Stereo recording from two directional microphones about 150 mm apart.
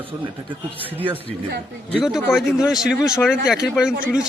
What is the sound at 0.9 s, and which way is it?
A man's voice, 10° right (ahead or behind).